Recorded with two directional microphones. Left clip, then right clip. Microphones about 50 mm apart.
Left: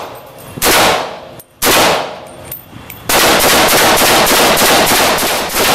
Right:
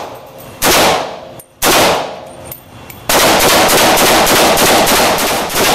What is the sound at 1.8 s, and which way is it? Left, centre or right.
Machine gun, left.